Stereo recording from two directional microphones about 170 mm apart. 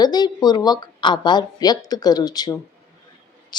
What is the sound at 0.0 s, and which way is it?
Speech, 25° left (ahead or behind).